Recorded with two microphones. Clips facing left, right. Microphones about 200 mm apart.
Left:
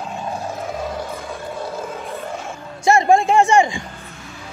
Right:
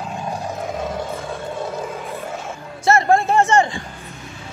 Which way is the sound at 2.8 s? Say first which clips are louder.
Left 2 dB; 15° left (ahead or behind).